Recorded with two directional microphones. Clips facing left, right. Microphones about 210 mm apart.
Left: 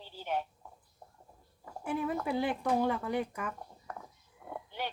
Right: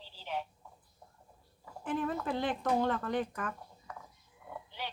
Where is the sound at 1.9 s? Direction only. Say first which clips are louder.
Left 1 dB; 10° left (ahead or behind).